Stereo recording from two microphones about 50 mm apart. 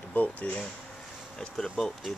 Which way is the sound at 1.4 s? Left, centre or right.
Centre.